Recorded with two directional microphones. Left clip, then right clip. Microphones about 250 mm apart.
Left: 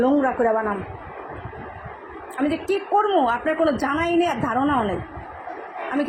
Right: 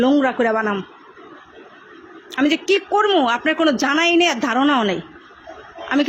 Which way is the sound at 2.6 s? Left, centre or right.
Right.